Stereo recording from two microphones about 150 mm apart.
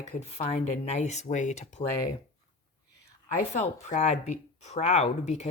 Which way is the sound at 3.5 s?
50° left (ahead or behind).